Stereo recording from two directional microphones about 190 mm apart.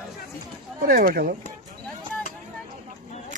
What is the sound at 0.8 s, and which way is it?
Speech, 50° right (ahead or behind).